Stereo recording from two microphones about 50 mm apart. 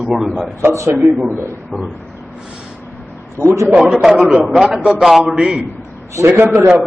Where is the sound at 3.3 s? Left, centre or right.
Right.